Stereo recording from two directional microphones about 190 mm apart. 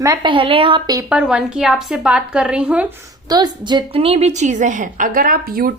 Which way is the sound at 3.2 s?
20° right (ahead or behind).